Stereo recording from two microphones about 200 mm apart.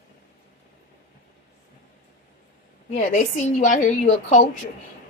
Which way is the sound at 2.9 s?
40° left (ahead or behind).